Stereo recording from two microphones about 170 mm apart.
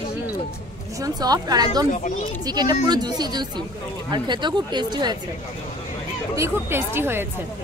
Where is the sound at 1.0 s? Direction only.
25° right (ahead or behind).